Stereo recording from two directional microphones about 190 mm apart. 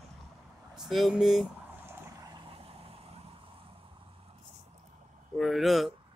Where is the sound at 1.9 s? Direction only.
20° right (ahead or behind).